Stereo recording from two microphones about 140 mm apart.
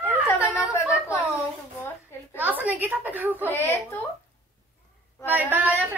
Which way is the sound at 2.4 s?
15° right (ahead or behind).